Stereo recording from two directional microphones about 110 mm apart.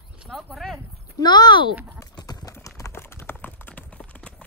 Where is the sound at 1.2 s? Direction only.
40° left (ahead or behind).